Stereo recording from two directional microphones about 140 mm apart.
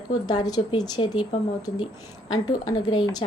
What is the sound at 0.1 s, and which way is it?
Speech, 30° left (ahead or behind).